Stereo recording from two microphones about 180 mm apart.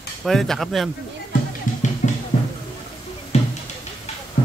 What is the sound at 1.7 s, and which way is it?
Music, 45° left (ahead or behind).